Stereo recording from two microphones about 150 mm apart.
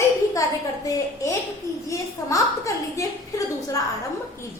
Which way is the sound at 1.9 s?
20° left (ahead or behind).